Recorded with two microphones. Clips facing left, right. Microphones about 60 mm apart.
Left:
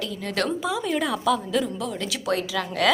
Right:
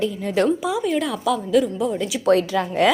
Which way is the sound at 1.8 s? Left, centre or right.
Right.